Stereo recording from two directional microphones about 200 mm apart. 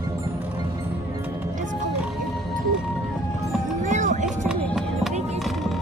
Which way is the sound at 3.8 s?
40° right (ahead or behind).